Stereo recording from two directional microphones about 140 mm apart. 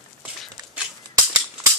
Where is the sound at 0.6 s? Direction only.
30° right (ahead or behind).